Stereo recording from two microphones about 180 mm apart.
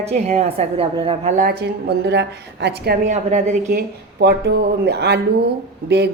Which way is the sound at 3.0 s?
40° right (ahead or behind).